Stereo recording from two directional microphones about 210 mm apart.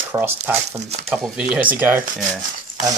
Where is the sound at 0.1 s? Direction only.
10° right (ahead or behind).